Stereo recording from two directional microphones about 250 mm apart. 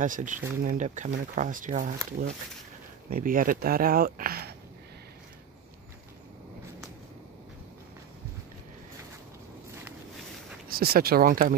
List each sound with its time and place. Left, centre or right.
0.0 s speech: right
3.1 s speech: right
10.7 s speech: right